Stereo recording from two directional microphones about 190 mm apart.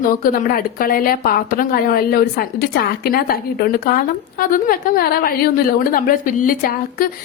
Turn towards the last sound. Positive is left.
turn(degrees=45)  # may be behind; listen again after turning